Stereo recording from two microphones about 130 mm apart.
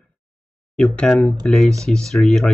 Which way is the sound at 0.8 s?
5° left (ahead or behind).